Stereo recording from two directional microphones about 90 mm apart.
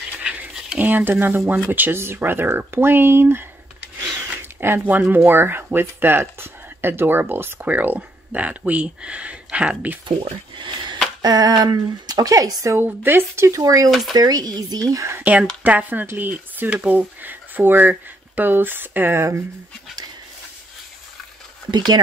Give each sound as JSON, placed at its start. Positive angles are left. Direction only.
{"t": 0.2, "sound": "a sound", "side_deg": -15}
{"t": 1.7, "sound": "speech", "side_deg": -25}
{"t": 10.0, "sound": "speech", "side_deg": -60}
{"t": 11.2, "sound": "speech", "side_deg": -45}
{"t": 12.7, "sound": "speech", "side_deg": -25}
{"t": 13.6, "sound": "speech", "side_deg": -40}
{"t": 13.8, "sound": "speech", "side_deg": 0}
{"t": 14.1, "sound": "speech", "side_deg": -45}
{"t": 15.6, "sound": "speech", "side_deg": -20}
{"t": 21.6, "sound": "speech", "side_deg": -50}